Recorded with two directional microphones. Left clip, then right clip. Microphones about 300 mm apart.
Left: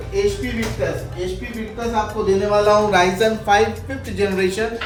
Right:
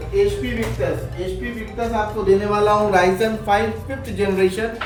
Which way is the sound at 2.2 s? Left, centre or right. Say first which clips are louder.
Left 1 dB; centre.